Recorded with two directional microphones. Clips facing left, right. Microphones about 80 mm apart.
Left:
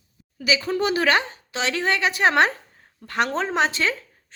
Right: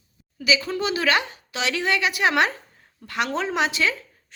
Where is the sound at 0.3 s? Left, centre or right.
Left.